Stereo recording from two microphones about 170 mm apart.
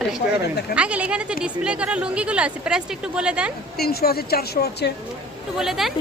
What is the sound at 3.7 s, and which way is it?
A woman's voice, 65° left (ahead or behind).